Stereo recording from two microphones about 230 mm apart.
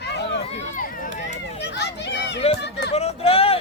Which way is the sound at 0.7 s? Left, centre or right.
Left.